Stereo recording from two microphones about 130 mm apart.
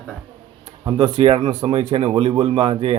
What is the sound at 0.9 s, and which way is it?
Speech, 40° right (ahead or behind).